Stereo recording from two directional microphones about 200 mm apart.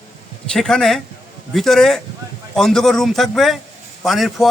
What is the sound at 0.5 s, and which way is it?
Speech, centre (ahead or behind).